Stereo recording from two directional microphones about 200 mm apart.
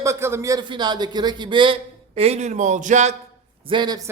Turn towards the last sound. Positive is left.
turn(degrees=-20)  # may be behind; listen again after turning